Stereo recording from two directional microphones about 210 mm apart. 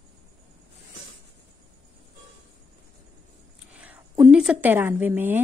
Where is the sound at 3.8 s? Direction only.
5° right (ahead or behind).